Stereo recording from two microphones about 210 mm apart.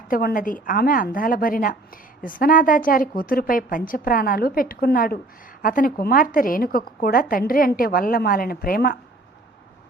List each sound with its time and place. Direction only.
0.1 s a woman's voice: 45° left (ahead or behind)